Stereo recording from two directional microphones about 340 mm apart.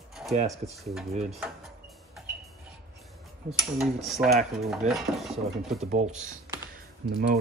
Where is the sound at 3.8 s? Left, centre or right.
Centre.